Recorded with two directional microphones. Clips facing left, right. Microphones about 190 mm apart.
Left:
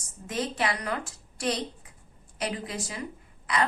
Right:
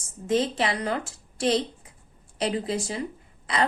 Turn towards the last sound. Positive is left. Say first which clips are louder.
# right 1 dB
turn(degrees=-25)  # may be behind; listen again after turning